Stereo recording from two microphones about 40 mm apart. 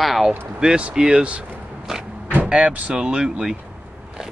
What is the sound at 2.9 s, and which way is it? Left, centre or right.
Speech, centre.